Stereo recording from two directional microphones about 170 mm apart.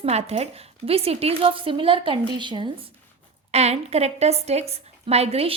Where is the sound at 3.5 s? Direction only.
40° right (ahead or behind).